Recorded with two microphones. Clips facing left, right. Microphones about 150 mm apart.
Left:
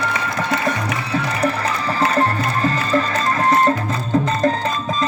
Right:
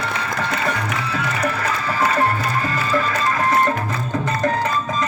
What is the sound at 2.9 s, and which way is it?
Music, 35° left (ahead or behind).